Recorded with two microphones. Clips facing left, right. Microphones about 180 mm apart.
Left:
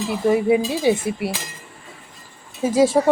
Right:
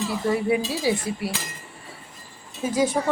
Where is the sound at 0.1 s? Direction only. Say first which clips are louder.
Left 7 dB; 20° left (ahead or behind).